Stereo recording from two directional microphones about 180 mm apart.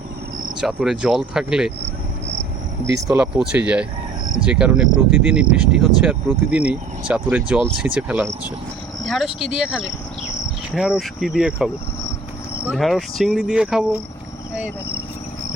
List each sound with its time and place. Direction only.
0.6 s speech: 5° right (ahead or behind)
3.0 s speech: 15° right (ahead or behind)
3.3 s speech: 5° right (ahead or behind)